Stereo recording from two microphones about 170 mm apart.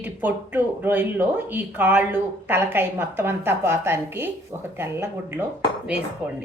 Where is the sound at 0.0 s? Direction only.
10° right (ahead or behind).